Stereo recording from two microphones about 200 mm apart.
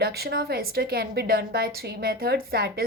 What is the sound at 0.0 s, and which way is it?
A woman's voice, 50° right (ahead or behind).